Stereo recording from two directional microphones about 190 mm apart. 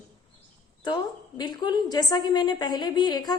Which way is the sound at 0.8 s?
25° left (ahead or behind).